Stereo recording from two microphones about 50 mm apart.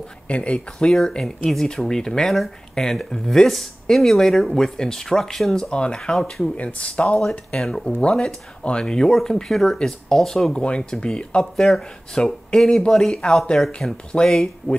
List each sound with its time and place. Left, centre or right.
0.3 s speech: left
1.5 s speech: centre
6.5 s speech: left
7.2 s speech: centre